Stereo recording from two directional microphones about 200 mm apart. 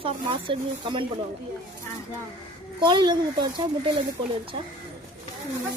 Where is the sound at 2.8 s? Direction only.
20° right (ahead or behind).